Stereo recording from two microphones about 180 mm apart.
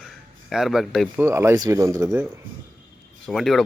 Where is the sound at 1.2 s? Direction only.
15° right (ahead or behind).